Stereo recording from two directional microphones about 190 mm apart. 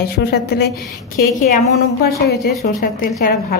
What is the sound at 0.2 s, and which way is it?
Speech, 55° left (ahead or behind).